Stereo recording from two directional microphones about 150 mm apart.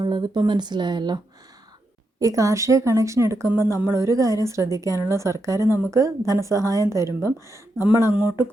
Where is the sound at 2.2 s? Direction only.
20° right (ahead or behind).